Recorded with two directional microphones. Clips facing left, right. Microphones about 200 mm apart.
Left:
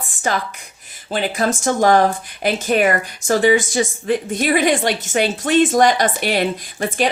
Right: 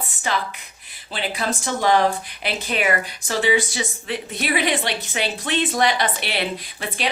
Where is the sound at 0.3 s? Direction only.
45° left (ahead or behind).